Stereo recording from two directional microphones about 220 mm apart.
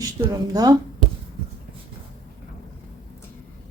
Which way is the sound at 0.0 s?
15° right (ahead or behind).